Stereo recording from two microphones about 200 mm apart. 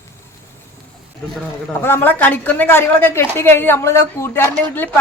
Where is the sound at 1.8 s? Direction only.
10° left (ahead or behind).